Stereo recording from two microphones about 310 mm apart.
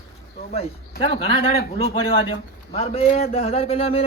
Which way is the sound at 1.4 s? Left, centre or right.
Left.